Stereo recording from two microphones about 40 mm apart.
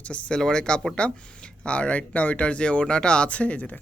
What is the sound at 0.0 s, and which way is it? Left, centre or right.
Speech, left.